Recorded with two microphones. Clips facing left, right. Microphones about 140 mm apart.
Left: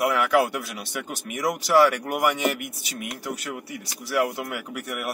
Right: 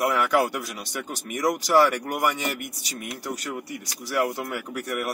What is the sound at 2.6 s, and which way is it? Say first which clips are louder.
Speech: left 1 dB; 40° right (ahead or behind).